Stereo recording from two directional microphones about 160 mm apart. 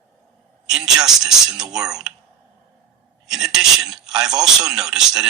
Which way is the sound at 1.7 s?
5° right (ahead or behind).